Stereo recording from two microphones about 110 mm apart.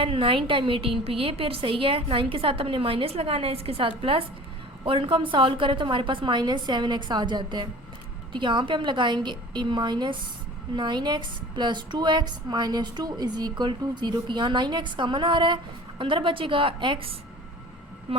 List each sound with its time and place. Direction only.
0.0 s a woman's voice: 55° right (ahead or behind)